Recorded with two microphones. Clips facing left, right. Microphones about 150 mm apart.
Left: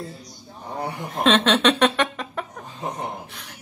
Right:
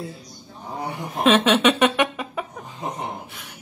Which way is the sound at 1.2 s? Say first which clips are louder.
Right 1 dB; 5° right (ahead or behind).